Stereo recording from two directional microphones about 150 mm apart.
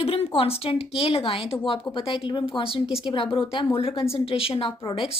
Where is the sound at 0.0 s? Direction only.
40° left (ahead or behind).